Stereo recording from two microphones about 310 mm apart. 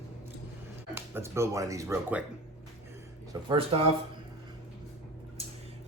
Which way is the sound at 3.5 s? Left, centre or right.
Centre.